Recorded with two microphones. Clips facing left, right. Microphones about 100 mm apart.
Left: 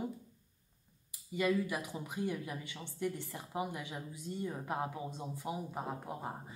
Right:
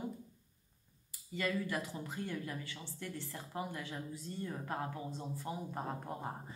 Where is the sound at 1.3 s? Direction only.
15° left (ahead or behind).